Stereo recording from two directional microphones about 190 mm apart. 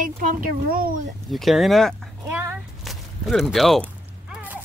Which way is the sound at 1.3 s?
Centre (ahead or behind).